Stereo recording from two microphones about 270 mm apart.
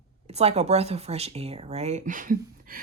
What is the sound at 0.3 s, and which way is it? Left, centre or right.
Speech, right.